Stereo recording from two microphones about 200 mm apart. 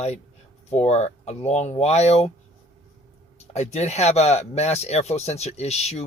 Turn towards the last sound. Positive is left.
turn(degrees=35)  # may be behind; listen again after turning